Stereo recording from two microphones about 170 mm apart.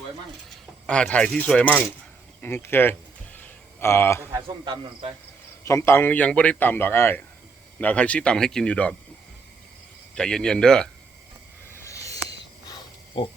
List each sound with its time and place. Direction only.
0.9 s a man's voice: 5° left (ahead or behind)
2.4 s a sound: 15° left (ahead or behind)
4.3 s speech: 25° right (ahead or behind)
5.6 s a man's voice: 15° left (ahead or behind)
10.2 s speech: 5° left (ahead or behind)
11.8 s a sound: 20° left (ahead or behind)